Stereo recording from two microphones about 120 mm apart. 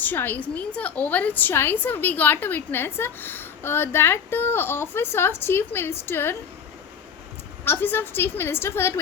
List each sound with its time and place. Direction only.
0.0 s a woman's voice: 15° left (ahead or behind)
7.6 s a woman's voice: 20° left (ahead or behind)